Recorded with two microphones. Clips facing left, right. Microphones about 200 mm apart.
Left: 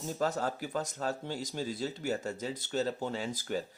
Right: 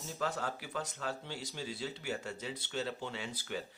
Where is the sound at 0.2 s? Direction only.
40° left (ahead or behind).